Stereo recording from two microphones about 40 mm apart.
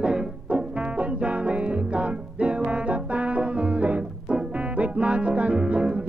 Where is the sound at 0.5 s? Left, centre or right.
Right.